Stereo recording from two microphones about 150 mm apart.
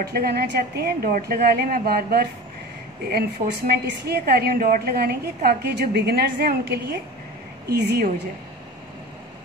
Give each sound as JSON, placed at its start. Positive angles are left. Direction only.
{"t": 0.0, "sound": "a woman's voice", "side_deg": -90}